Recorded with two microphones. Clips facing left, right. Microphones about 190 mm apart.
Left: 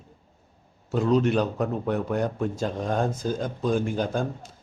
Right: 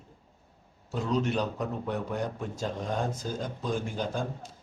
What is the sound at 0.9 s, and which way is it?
A man's voice, 60° left (ahead or behind).